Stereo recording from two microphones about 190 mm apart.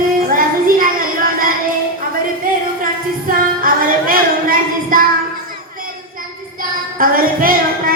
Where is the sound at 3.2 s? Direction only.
50° right (ahead or behind).